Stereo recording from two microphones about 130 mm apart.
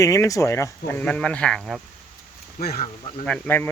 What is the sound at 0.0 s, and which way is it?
Speech, 25° left (ahead or behind).